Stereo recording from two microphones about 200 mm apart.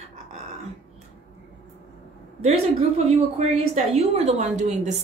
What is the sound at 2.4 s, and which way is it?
A woman's voice, 30° right (ahead or behind).